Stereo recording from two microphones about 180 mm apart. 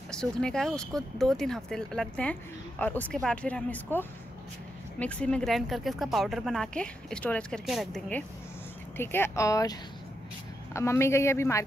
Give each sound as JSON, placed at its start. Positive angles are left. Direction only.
{"t": 0.1, "sound": "speech", "side_deg": 5}
{"t": 8.9, "sound": "speech", "side_deg": 10}